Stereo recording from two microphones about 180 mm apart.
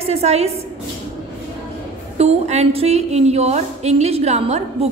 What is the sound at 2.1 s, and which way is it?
A woman's voice, 35° right (ahead or behind).